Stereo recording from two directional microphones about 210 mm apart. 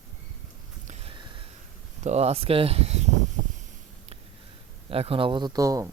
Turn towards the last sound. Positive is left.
turn(degrees=-15)  # may be behind; listen again after turning